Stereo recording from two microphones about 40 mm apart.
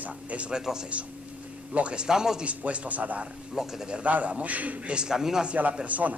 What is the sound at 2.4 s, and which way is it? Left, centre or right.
Speech, right.